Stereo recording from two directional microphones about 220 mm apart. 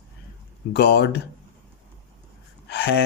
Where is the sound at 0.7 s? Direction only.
50° left (ahead or behind).